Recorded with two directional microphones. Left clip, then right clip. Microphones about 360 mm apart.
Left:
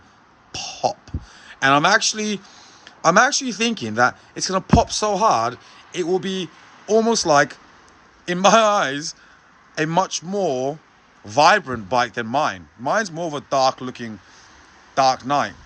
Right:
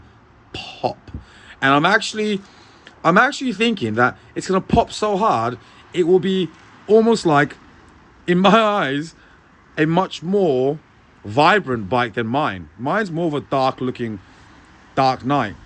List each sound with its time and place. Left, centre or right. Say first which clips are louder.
0.5 s music: left 1 dB; centre
1.5 s speech: even; centre